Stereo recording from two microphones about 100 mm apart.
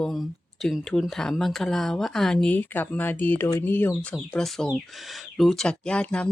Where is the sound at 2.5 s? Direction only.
20° left (ahead or behind).